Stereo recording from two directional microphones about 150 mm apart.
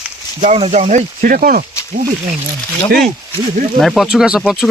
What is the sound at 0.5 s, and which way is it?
Speech, 45° right (ahead or behind).